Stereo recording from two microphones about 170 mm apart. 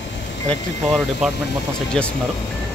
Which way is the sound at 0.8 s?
5° left (ahead or behind).